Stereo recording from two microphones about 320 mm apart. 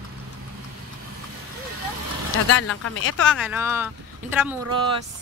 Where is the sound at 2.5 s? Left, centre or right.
Left.